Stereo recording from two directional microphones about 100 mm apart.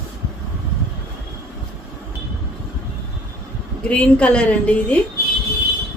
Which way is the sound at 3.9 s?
10° left (ahead or behind).